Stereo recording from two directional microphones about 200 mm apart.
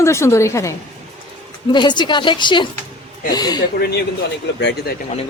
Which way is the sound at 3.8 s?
50° left (ahead or behind).